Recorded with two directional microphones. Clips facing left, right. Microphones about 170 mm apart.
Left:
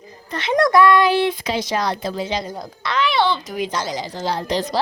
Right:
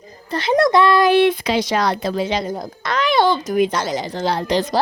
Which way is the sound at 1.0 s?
60° right (ahead or behind).